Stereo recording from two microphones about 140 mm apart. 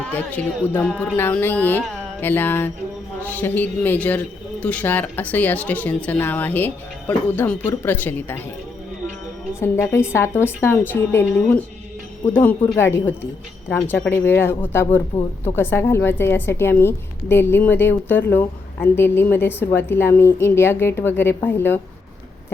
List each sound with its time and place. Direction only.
0.0 s a woman's voice: 10° left (ahead or behind)
9.6 s a woman's voice: 20° left (ahead or behind)